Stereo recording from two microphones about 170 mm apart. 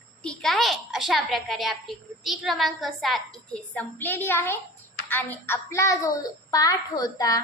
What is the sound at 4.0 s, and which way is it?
A woman's voice, 10° left (ahead or behind).